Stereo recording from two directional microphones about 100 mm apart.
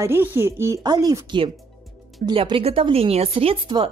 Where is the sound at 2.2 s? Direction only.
55° right (ahead or behind); by 3.6 s 75° right (ahead or behind).